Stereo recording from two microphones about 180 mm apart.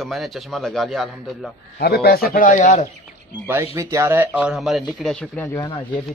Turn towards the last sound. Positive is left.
turn(degrees=25)  # may be behind; listen again after turning